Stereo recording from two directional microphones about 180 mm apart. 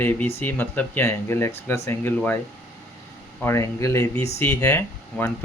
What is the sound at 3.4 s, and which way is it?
Speech, 15° left (ahead or behind).